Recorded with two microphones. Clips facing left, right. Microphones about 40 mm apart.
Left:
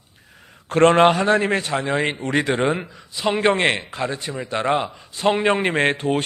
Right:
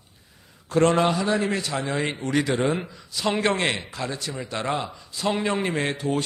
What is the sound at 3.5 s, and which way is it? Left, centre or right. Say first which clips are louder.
A man's voice: left 5 dB; left.